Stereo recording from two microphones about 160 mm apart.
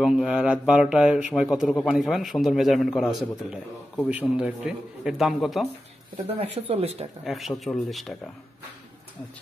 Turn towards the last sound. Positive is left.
turn(degrees=0)  # may be behind; listen again after turning